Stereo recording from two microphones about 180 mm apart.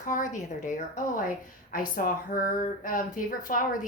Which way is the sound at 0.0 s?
45° left (ahead or behind).